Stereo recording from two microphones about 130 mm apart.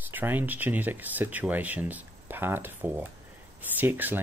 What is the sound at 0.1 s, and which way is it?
Speech, 15° right (ahead or behind).